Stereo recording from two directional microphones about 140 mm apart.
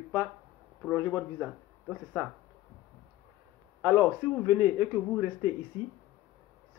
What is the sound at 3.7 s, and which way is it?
A man's voice, 10° right (ahead or behind).